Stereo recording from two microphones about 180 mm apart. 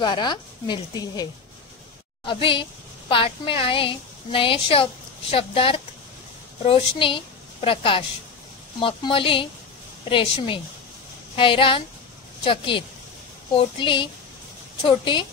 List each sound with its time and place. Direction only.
0.0 s a woman's voice: 25° left (ahead or behind)